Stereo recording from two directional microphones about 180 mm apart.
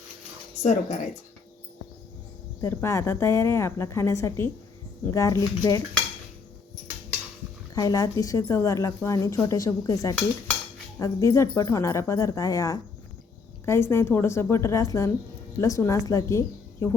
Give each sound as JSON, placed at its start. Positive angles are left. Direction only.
{"t": 0.6, "sound": "speech", "side_deg": 40}
{"t": 2.6, "sound": "a woman's voice", "side_deg": 15}
{"t": 7.8, "sound": "a woman's voice", "side_deg": 20}